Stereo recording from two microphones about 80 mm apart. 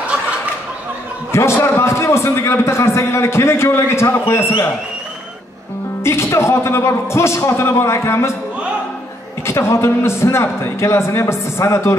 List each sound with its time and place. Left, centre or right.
1.3 s a man's voice: left
6.0 s a man's voice: left
9.5 s a man's voice: left